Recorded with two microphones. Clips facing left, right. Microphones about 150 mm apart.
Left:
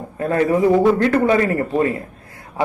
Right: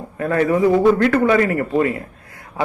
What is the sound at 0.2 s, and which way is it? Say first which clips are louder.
A man's voice: even; 25° left (ahead or behind).